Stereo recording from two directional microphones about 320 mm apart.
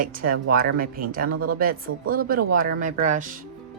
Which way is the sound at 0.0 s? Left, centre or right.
Right.